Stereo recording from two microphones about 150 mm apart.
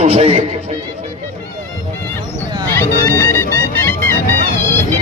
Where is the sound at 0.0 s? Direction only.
45° right (ahead or behind).